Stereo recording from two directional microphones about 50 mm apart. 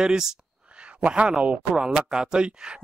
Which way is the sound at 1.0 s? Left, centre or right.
Right.